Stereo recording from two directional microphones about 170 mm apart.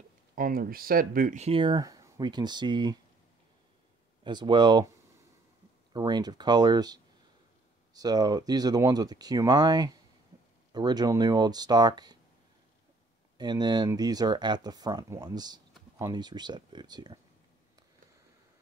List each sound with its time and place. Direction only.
0.4 s speech: 55° right (ahead or behind)
1.4 s speech: 30° right (ahead or behind)
4.2 s speech: 25° right (ahead or behind)
5.9 s speech: 25° right (ahead or behind)
13.4 s speech: 25° right (ahead or behind)